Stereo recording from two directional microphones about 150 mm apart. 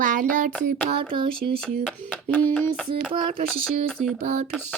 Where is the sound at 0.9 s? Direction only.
35° right (ahead or behind).